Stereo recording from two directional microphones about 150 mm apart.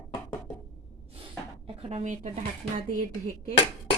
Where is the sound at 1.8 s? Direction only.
45° right (ahead or behind); by 3.6 s 65° right (ahead or behind).